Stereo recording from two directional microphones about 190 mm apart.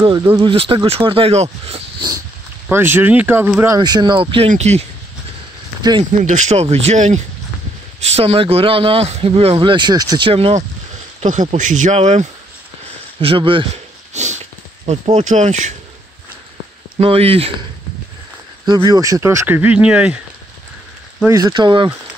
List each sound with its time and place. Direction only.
0.0 s speech: 25° right (ahead or behind)
2.7 s speech: 10° right (ahead or behind); by 4.8 s 35° right (ahead or behind)
5.8 s speech: 20° right (ahead or behind)
6.2 s speech: 40° right (ahead or behind)
8.2 s speech: 30° right (ahead or behind)
14.1 s speech: 40° right (ahead or behind)
17.0 s speech: 30° right (ahead or behind)
18.7 s speech: 20° right (ahead or behind)
21.3 s speech: 20° right (ahead or behind)